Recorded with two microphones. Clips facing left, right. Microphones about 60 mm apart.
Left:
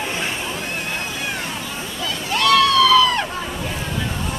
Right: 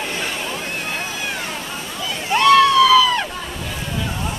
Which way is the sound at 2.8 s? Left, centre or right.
Centre.